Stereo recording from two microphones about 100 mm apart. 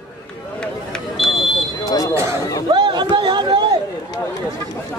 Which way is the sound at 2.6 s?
50° right (ahead or behind).